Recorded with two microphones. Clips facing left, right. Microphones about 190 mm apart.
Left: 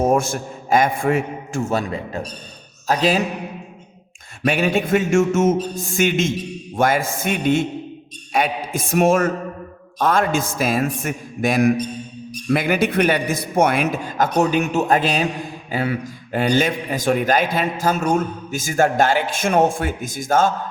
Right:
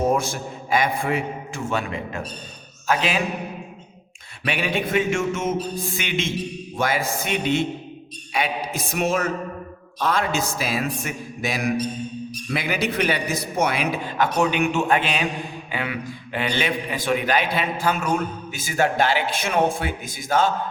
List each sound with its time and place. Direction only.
0.0 s a man's voice: 50° left (ahead or behind)
4.4 s a man's voice: 45° left (ahead or behind)